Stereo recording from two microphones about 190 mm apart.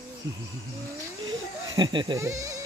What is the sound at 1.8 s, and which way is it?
Speech, 25° right (ahead or behind).